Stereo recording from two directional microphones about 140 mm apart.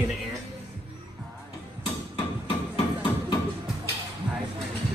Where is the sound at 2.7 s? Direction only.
35° left (ahead or behind).